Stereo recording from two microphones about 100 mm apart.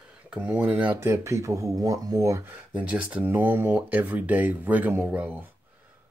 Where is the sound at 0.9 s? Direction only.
30° right (ahead or behind).